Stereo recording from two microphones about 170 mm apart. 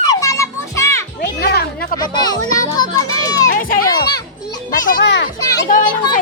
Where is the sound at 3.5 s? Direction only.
55° left (ahead or behind).